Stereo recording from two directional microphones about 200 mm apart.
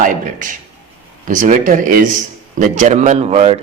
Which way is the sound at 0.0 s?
40° right (ahead or behind).